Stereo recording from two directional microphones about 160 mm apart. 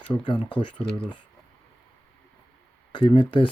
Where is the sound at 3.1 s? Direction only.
30° left (ahead or behind).